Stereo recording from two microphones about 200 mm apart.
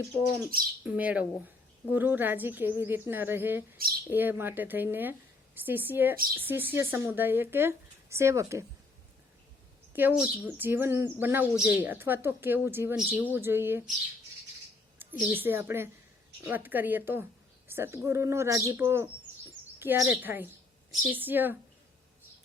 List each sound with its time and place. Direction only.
0.5 s speech: 45° right (ahead or behind)
0.9 s speech: 5° right (ahead or behind)
9.9 s speech: 10° right (ahead or behind)
15.2 s speech: 10° right (ahead or behind)